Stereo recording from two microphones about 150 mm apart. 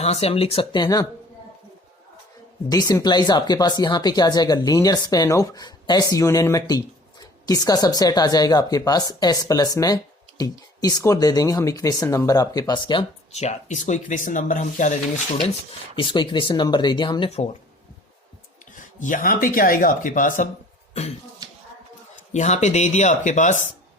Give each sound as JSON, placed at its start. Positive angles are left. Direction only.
{"t": 0.0, "sound": "speech", "side_deg": 45}
{"t": 2.6, "sound": "speech", "side_deg": 25}
{"t": 13.4, "sound": "speech", "side_deg": 50}
{"t": 16.0, "sound": "speech", "side_deg": 35}
{"t": 18.7, "sound": "speech", "side_deg": 60}
{"t": 20.9, "sound": "cough", "side_deg": 45}
{"t": 22.3, "sound": "speech", "side_deg": 50}